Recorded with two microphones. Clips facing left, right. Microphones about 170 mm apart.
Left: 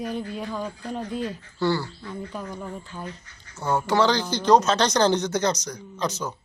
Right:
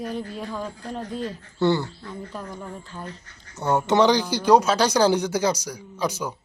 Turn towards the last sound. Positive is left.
turn(degrees=-10)  # may be behind; listen again after turning